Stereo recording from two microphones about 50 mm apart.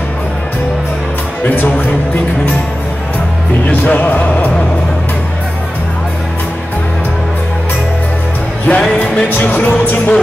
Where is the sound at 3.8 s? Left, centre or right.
Left.